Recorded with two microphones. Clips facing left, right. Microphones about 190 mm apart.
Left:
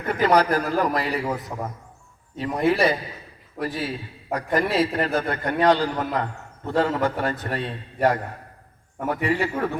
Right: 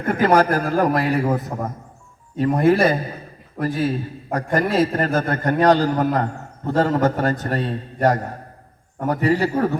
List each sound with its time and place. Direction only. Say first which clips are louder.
0.0 s a man's voice: right 3 dB; 50° right (ahead or behind)